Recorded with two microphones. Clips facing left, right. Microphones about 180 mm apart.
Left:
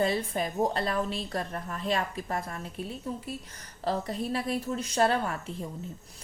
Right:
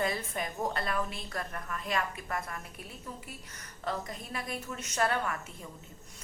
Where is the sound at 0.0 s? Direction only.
30° left (ahead or behind).